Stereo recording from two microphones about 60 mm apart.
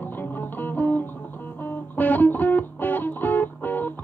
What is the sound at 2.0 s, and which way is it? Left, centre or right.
Music, left.